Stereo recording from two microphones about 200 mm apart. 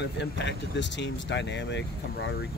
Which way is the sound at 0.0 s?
60° left (ahead or behind).